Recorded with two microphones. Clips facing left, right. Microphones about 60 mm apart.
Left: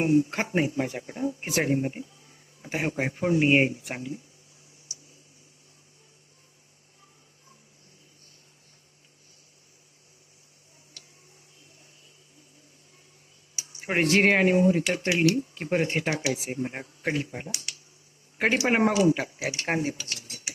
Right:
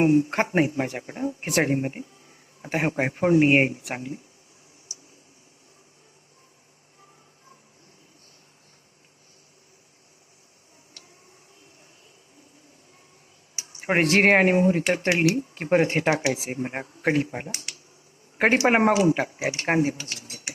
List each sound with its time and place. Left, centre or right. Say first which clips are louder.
0.0 s speech: right 3 dB; right
13.6 s speech: right 3 dB; right
16.2 s speech: right 3 dB; right
16.5 s speech: right 2 dB; right